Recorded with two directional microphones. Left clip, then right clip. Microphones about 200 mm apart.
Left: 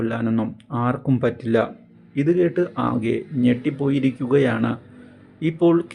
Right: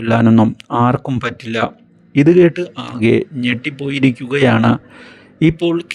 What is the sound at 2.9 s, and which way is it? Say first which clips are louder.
Speech: right 9 dB; 40° right (ahead or behind).